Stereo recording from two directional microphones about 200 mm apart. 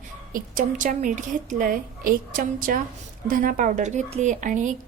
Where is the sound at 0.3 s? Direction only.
40° right (ahead or behind).